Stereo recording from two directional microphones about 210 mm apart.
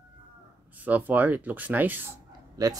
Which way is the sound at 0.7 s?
10° right (ahead or behind).